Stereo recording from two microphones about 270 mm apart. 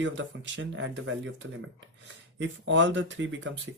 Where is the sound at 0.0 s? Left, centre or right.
Right.